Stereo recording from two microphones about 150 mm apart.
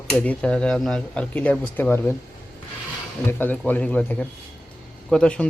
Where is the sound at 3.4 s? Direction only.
10° left (ahead or behind).